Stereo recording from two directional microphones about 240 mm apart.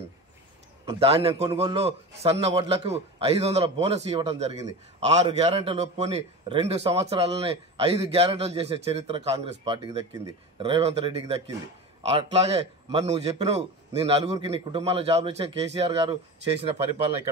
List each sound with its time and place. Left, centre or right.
0.8 s a man's voice: right